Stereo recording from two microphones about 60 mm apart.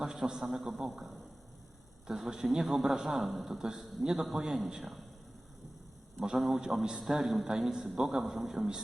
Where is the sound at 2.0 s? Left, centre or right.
Centre.